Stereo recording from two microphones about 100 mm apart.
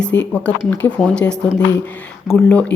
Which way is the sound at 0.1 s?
20° left (ahead or behind).